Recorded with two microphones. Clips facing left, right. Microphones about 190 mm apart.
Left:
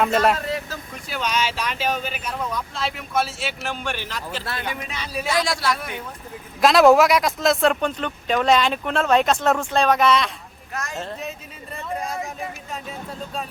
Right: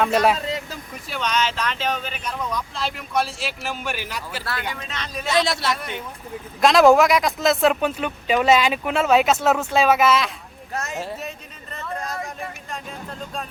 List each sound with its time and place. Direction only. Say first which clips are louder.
0.3 s vehicle: left 1 dB; 20° right (ahead or behind)
1.0 s speech: right 1 dB; 5° left (ahead or behind)
4.7 s speech: left 2 dB; 10° left (ahead or behind)
5.3 s a man's voice: right 2 dB; 25° right (ahead or behind)
6.6 s speech: even; centre (ahead or behind)
10.8 s a man's voice: right 2 dB; 25° right (ahead or behind)
11.0 s speech: even; 5° right (ahead or behind)
11.7 s a sound: left 2 dB; 10° left (ahead or behind)
12.7 s speech: left 1 dB; 5° left (ahead or behind)